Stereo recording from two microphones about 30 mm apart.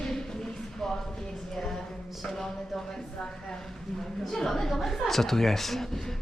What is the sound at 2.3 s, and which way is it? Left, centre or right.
Speech, centre.